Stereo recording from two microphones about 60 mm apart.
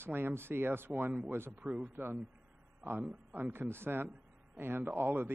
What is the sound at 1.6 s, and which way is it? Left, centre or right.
Speech, centre.